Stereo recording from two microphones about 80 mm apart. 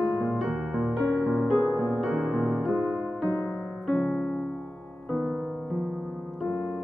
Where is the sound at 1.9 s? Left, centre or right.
Centre.